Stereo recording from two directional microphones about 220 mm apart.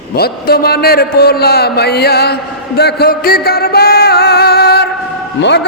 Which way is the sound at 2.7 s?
45° left (ahead or behind).